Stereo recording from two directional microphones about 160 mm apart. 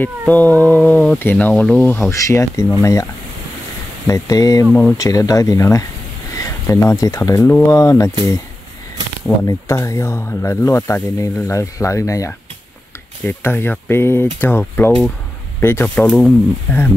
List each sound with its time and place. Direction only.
0.3 s speech: 10° left (ahead or behind)
4.1 s speech: 20° left (ahead or behind)
9.4 s speech: 15° left (ahead or behind)